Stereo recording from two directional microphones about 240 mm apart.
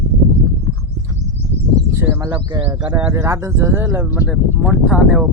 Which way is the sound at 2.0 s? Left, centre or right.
Centre.